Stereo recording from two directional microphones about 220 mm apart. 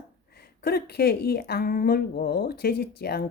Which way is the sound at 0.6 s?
45° left (ahead or behind).